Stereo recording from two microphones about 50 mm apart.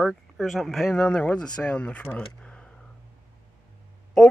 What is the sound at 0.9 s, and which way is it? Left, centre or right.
Speech, left.